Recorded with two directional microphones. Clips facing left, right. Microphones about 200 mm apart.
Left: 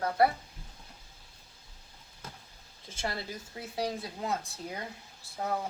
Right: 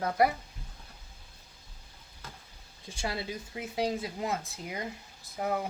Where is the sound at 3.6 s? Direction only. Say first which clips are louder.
Right 3 dB; 15° right (ahead or behind).